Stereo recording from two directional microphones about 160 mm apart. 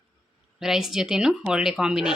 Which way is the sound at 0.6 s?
Centre (ahead or behind).